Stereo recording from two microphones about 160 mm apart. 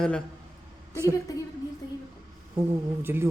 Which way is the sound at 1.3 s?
20° left (ahead or behind).